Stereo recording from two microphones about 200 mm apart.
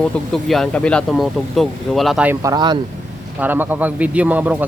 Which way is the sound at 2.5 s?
20° right (ahead or behind).